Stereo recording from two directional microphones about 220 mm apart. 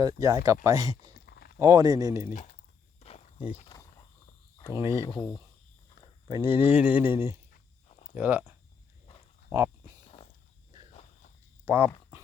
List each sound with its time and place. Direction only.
0.0 s speech: 15° right (ahead or behind)
1.3 s a sound: 45° left (ahead or behind)
1.5 s speech: 15° right (ahead or behind)
2.3 s speech: 35° left (ahead or behind)
3.0 s walk: 30° left (ahead or behind)
4.5 s a sound: 15° left (ahead or behind)
4.8 s speech: 15° right (ahead or behind)
5.0 s speech: 15° left (ahead or behind)
6.2 s speech: 15° right (ahead or behind)
11.6 s speech: 10° right (ahead or behind)